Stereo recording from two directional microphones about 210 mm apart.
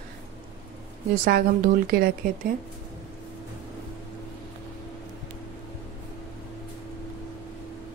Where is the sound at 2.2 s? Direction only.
40° right (ahead or behind).